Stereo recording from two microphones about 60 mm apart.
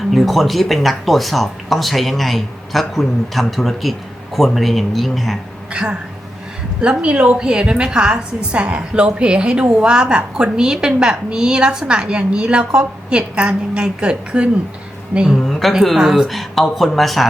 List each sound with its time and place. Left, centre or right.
0.1 s speech: centre
5.7 s a woman's voice: centre
15.4 s a woman's voice: centre
16.0 s a woman's voice: centre
16.3 s speech: centre